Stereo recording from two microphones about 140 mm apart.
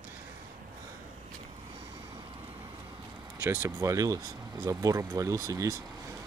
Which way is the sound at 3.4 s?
20° right (ahead or behind).